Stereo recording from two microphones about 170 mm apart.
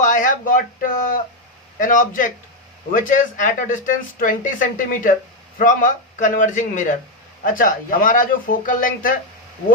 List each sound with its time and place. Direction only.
0.0 s speech: 50° left (ahead or behind)